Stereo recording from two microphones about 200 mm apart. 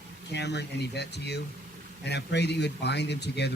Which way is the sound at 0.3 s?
60° left (ahead or behind).